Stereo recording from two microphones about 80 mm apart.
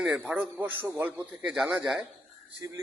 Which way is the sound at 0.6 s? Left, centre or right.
Right.